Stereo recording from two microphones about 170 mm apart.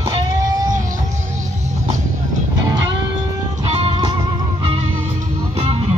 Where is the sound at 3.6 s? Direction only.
35° right (ahead or behind).